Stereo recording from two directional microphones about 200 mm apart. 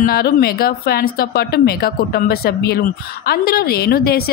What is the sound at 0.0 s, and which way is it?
A woman's voice, 50° left (ahead or behind).